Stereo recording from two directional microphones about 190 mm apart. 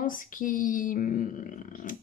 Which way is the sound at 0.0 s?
45° left (ahead or behind).